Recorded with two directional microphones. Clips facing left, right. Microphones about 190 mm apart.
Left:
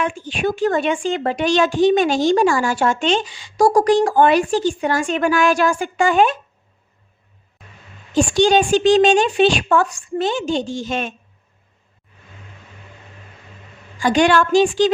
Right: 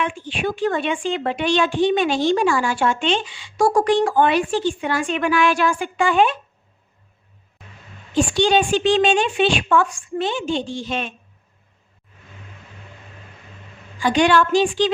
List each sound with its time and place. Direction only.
0.0 s a woman's voice: 45° left (ahead or behind)
8.1 s a woman's voice: 45° left (ahead or behind)
14.0 s a woman's voice: 45° left (ahead or behind)